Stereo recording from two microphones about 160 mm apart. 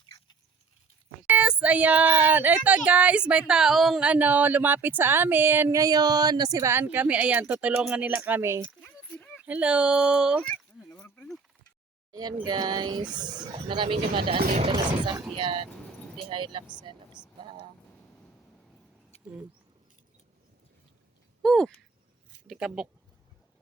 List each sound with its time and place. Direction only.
1.3 s speech: 10° right (ahead or behind)
8.8 s a sound: 10° left (ahead or behind)
9.5 s speech: 10° right (ahead or behind)
11.0 s a sound: 10° left (ahead or behind)
12.4 s speech: 25° right (ahead or behind)
14.3 s speech: 65° right (ahead or behind)
14.6 s speech: 30° right (ahead or behind)
17.4 s vehicle: 30° right (ahead or behind)
21.4 s speech: 5° left (ahead or behind)